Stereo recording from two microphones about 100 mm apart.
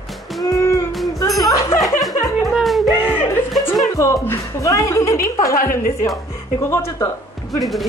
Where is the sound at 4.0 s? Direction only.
30° left (ahead or behind).